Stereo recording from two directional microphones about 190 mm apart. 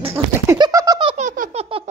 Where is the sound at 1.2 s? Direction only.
40° right (ahead or behind).